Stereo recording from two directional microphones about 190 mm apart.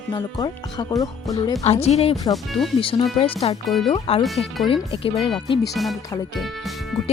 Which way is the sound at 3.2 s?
30° left (ahead or behind).